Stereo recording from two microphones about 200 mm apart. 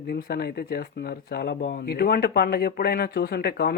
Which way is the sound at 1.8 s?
50° left (ahead or behind).